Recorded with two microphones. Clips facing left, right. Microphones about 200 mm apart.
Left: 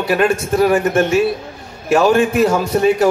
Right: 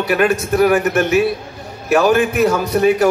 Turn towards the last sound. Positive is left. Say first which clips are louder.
# even
turn(degrees=30)  # may be behind; listen again after turning